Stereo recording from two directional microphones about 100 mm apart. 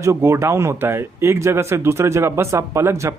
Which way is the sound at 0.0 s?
25° right (ahead or behind).